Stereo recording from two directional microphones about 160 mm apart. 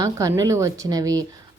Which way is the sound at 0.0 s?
20° right (ahead or behind).